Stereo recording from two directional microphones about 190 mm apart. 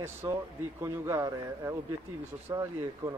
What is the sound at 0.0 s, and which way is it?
Speech, 15° right (ahead or behind).